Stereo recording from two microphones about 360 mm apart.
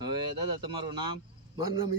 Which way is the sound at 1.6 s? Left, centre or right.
Right.